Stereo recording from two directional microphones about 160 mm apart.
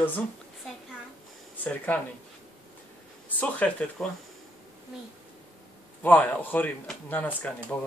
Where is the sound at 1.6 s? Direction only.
10° left (ahead or behind).